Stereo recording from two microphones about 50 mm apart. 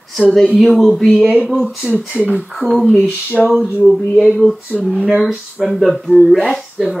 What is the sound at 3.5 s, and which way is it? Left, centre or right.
Speech, centre.